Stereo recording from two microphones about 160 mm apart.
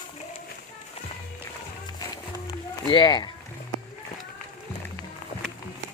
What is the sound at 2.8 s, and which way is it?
Speech, 30° left (ahead or behind).